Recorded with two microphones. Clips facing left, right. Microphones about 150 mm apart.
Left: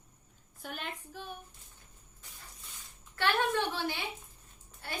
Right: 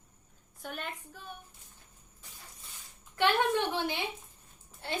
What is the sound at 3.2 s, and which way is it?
A woman's voice, 15° right (ahead or behind).